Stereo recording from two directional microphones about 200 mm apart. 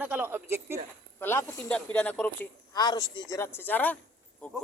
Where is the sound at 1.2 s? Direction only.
10° left (ahead or behind).